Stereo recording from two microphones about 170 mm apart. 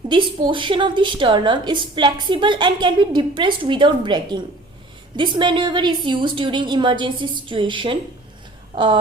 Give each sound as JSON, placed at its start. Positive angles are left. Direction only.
{"t": 0.1, "sound": "a woman's voice", "side_deg": -30}